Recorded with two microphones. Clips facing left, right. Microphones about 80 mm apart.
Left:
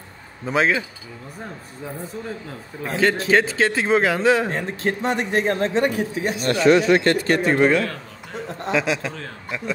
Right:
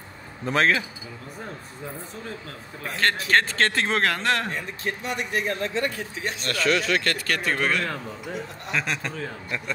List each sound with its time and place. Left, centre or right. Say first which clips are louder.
0.5 s a man's voice: left 2 dB; centre
3.3 s a man's voice: left 3 dB; centre
4.5 s speech: left 6 dB; left
6.2 s a man's voice: left 5 dB; centre
6.5 s speech: left 8 dB; left
8.7 s a man's voice: left 5 dB; centre